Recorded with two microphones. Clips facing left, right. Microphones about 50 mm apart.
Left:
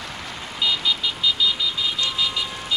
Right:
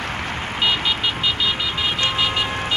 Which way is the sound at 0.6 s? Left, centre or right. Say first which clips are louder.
Right 2 dB; right.